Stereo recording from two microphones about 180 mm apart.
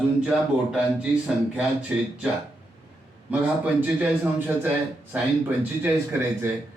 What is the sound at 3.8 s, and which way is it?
A man's voice, 10° right (ahead or behind).